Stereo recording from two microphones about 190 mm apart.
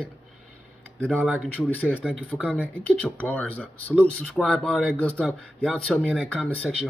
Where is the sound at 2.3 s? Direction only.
5° left (ahead or behind).